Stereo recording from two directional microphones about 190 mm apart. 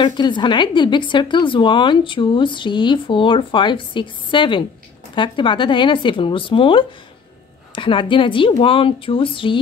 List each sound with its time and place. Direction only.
0.0 s speech: 25° left (ahead or behind)